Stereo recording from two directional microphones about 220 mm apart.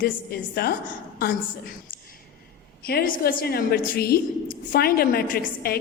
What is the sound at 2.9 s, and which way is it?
A woman's voice, 45° left (ahead or behind).